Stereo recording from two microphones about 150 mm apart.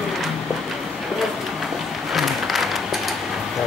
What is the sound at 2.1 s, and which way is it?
Applause, centre (ahead or behind).